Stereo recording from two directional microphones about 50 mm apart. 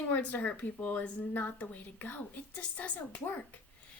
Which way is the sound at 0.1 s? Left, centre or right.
Left.